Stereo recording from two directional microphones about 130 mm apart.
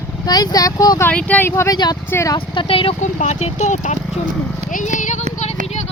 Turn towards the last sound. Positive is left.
turn(degrees=75)  # may be behind; listen again after turning